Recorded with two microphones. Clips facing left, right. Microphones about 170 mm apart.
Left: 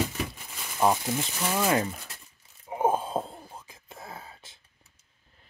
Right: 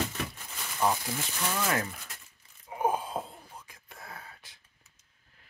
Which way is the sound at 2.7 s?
25° left (ahead or behind).